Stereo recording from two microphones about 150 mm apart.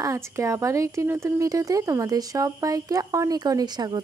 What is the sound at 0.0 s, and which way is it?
Speech, 20° right (ahead or behind).